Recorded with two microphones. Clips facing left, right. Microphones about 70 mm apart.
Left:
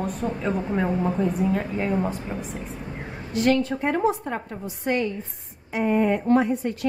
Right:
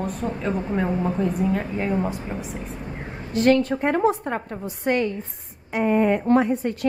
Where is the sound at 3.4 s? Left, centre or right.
Right.